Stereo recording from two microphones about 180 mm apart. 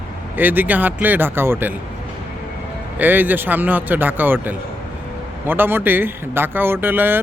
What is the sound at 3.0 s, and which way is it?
A man's voice, 10° right (ahead or behind).